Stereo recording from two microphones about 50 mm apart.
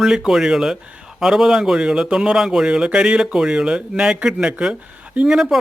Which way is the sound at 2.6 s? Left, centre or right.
Centre.